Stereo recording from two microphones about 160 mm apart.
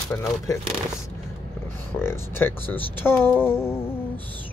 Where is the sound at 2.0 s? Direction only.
15° left (ahead or behind).